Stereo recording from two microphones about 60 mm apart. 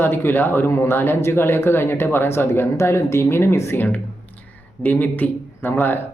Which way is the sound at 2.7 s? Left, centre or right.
Left.